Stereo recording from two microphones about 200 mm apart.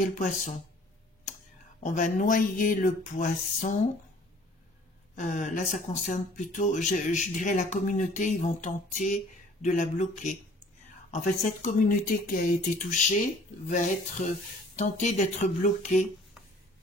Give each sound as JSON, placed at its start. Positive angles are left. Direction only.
{"t": 0.0, "sound": "speech", "side_deg": 40}
{"t": 1.3, "sound": "a sound", "side_deg": 35}
{"t": 1.8, "sound": "speech", "side_deg": 40}
{"t": 5.1, "sound": "speech", "side_deg": 40}